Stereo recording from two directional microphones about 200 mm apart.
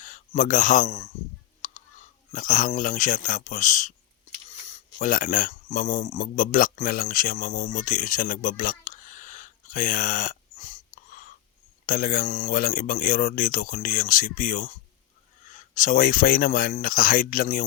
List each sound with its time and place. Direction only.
0.0 s a man's voice: 40° left (ahead or behind)